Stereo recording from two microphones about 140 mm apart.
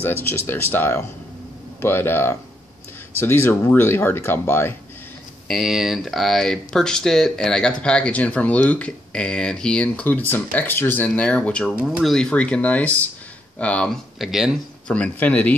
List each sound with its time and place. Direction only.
0.0 s speech: 15° left (ahead or behind)
5.5 s speech: 5° right (ahead or behind)
14.9 s speech: 10° left (ahead or behind)